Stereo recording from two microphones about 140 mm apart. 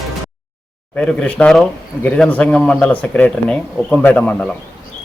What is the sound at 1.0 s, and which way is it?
Speech, 5° left (ahead or behind).